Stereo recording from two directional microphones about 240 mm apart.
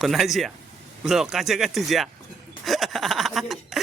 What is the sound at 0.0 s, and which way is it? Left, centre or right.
Speech, centre.